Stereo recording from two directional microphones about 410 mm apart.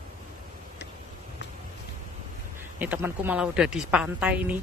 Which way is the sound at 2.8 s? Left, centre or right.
Centre.